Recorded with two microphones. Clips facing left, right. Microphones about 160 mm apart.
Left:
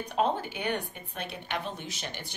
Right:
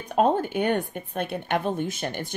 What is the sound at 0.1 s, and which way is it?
Speech, 50° right (ahead or behind).